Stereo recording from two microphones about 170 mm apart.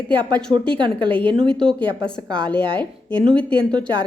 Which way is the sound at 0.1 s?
30° right (ahead or behind).